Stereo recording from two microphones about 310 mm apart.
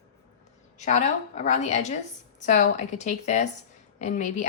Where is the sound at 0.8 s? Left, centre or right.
Left.